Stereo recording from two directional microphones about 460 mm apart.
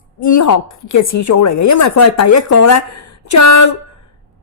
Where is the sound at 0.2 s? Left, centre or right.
Left.